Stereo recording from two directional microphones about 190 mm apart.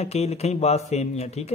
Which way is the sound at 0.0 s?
35° left (ahead or behind).